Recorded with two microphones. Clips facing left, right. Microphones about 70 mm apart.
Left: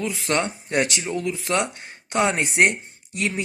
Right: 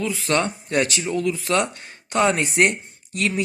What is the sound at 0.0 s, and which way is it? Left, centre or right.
Speech, left.